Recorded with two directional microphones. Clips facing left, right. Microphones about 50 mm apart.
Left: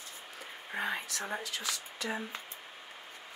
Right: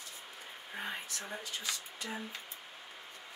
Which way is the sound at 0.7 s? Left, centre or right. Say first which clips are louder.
Left 6 dB; left.